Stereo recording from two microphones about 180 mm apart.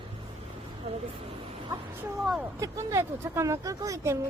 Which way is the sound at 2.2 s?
Centre (ahead or behind).